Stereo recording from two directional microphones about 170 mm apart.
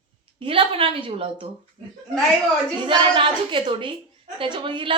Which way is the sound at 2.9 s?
30° right (ahead or behind).